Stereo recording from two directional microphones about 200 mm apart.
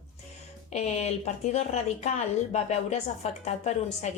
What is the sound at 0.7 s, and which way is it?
A woman's voice, 35° left (ahead or behind).